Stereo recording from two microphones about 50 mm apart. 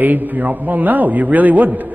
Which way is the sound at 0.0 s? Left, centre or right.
Right.